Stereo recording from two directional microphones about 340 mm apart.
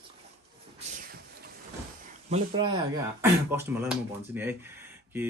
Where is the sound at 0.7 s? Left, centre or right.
Right.